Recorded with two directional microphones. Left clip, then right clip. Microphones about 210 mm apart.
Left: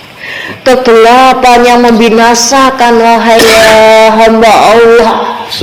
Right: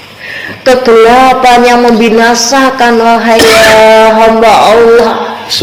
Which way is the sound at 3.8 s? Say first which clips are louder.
Even; 55° left (ahead or behind).